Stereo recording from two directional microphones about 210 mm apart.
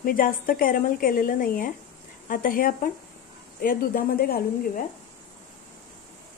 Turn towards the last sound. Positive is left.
turn(degrees=45)  # may be behind; listen again after turning